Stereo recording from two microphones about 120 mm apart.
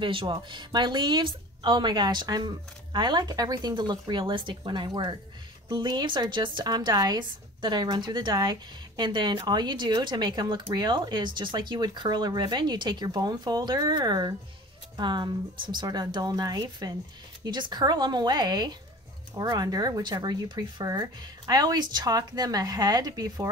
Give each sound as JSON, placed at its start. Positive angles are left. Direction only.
{"t": 0.0, "sound": "a woman's voice", "side_deg": -45}